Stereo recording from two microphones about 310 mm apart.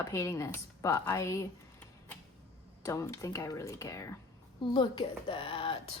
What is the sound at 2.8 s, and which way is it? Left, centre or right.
A woman's voice, centre.